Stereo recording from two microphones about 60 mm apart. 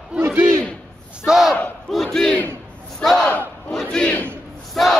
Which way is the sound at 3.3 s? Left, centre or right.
Left.